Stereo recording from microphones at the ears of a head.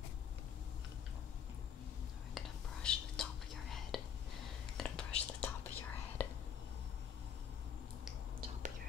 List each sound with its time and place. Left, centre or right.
2.3 s whispering: left